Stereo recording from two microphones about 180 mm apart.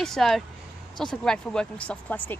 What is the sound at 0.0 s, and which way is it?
Speech, centre (ahead or behind).